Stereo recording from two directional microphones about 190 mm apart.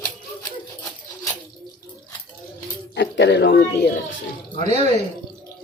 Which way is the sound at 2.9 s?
65° left (ahead or behind).